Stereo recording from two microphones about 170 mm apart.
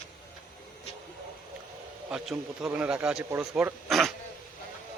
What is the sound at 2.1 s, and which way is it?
A man's voice, centre (ahead or behind).